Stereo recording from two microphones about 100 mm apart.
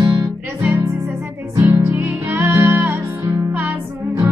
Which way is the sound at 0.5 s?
25° right (ahead or behind).